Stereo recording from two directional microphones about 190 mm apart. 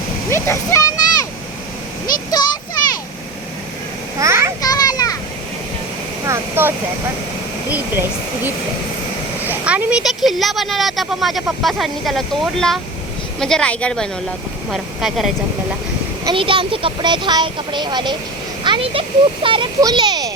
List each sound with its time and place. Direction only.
0.3 s a child's voice: 15° left (ahead or behind)
2.4 s a sound: 20° left (ahead or behind)
4.2 s a sound: 15° right (ahead or behind)
4.6 s children playing: 20° left (ahead or behind)
6.2 s vehicle: 15° right (ahead or behind)
9.4 s speech: 10° right (ahead or behind)
16.2 s a child's voice: 25° right (ahead or behind)